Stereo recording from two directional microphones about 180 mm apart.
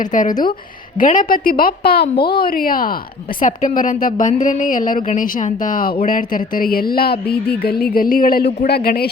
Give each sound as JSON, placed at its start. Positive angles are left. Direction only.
{"t": 0.0, "sound": "a woman's voice", "side_deg": 45}